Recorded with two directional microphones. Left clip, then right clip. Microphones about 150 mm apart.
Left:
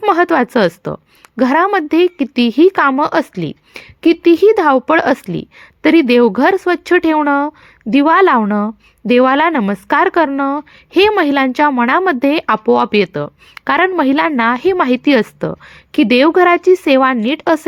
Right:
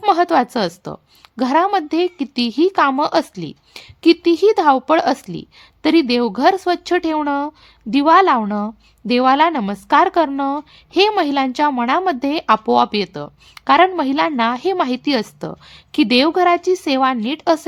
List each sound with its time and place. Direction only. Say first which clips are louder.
0.1 s a woman's voice: left 2 dB; 15° left (ahead or behind)